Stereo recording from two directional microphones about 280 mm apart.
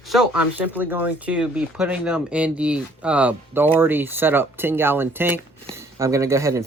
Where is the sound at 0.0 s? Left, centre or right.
Centre.